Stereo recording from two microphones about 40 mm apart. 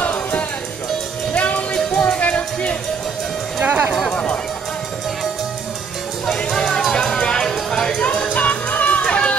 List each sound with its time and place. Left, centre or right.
0.0 s music: left
3.6 s speech: right
6.2 s music: centre
8.4 s music: left
9.1 s run: left